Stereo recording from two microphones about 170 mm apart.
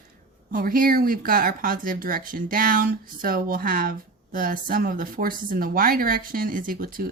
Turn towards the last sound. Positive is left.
turn(degrees=-55)  # may be behind; listen again after turning